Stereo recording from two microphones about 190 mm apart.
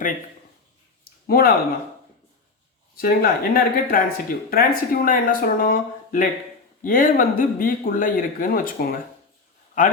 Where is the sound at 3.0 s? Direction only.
50° left (ahead or behind).